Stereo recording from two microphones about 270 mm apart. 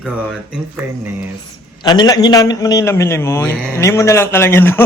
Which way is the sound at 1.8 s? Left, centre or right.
Centre.